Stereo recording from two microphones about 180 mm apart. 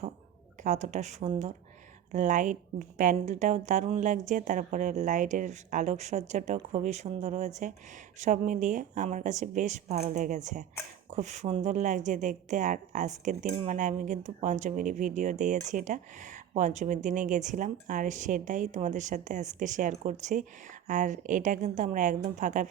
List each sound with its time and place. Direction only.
0.6 s a woman's voice: 40° right (ahead or behind)